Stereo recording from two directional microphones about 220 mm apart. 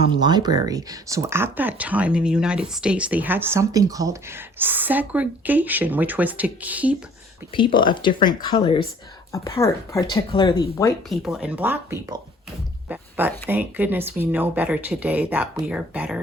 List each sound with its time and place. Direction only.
0.0 s speech: 20° right (ahead or behind)
7.5 s speech: 20° left (ahead or behind)
9.3 s speech: 15° left (ahead or behind)
11.1 s speech: centre (ahead or behind)
12.9 s a sound: 10° right (ahead or behind)
13.5 s speech: 10° right (ahead or behind)